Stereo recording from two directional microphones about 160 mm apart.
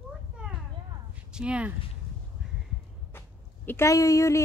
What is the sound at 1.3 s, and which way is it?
Speech, 5° right (ahead or behind).